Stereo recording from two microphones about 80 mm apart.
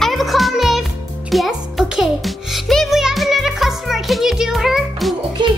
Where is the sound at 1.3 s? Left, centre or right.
Centre.